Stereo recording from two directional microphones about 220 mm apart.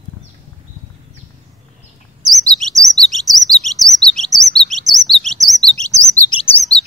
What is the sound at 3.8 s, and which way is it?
Chirp, centre (ahead or behind).